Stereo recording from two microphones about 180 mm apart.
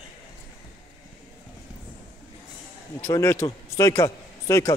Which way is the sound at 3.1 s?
15° left (ahead or behind).